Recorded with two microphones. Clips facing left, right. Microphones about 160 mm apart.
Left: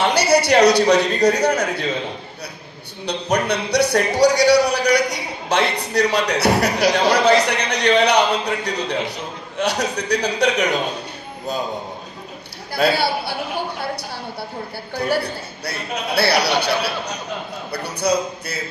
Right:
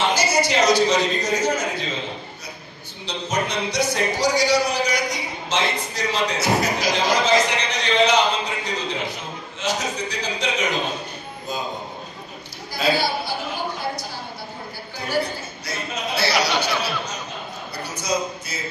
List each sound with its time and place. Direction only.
0.0 s a man's voice: 65° left (ahead or behind)
3.1 s speech: 65° left (ahead or behind)
12.7 s a man's voice: 65° left (ahead or behind)